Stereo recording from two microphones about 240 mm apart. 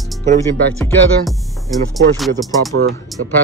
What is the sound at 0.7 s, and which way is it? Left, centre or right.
Music, centre.